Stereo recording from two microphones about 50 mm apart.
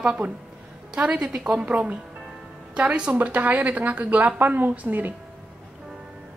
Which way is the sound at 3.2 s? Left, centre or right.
Right.